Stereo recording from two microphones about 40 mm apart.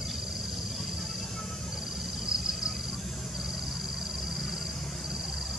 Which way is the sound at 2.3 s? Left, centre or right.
Centre.